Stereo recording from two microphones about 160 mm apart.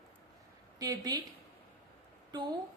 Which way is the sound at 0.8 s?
25° right (ahead or behind).